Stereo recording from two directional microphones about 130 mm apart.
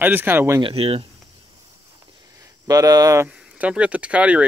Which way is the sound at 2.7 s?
30° right (ahead or behind).